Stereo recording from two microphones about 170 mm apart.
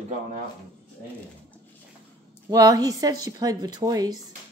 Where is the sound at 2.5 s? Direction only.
20° right (ahead or behind).